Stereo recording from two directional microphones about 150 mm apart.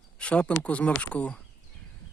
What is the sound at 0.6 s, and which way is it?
Speech, 10° left (ahead or behind).